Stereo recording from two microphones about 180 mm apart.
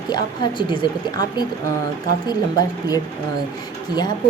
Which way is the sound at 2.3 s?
20° left (ahead or behind).